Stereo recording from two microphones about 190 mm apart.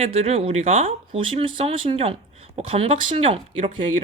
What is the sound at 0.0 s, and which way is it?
Speech, 30° right (ahead or behind).